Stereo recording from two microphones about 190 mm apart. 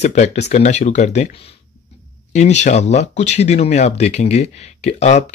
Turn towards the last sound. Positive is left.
turn(degrees=35)  # may be behind; listen again after turning